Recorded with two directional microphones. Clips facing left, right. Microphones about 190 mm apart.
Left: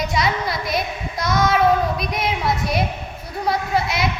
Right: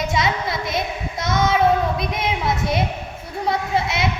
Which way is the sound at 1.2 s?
25° right (ahead or behind).